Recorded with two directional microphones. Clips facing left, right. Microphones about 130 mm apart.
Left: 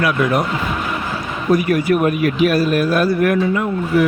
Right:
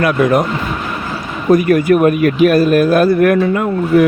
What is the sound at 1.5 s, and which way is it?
Speech, 50° right (ahead or behind).